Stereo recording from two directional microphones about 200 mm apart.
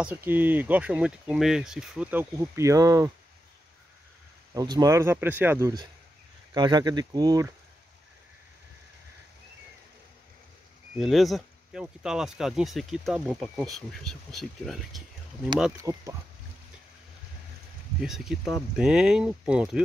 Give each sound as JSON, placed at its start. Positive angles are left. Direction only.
{"t": 0.0, "sound": "speech", "side_deg": -10}
{"t": 4.6, "sound": "speech", "side_deg": -20}
{"t": 11.0, "sound": "speech", "side_deg": 0}
{"t": 15.8, "sound": "speech", "side_deg": -15}
{"t": 18.0, "sound": "speech", "side_deg": 0}